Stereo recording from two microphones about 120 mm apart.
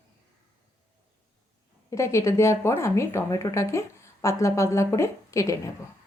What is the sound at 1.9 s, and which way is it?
Speech, 25° left (ahead or behind).